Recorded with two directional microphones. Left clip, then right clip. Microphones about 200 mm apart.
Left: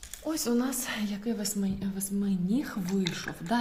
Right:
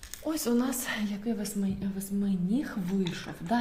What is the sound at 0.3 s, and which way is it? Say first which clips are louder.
A woman's voice: even; 5° right (ahead or behind).